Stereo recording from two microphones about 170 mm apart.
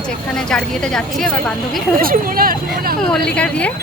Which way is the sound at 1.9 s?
55° right (ahead or behind).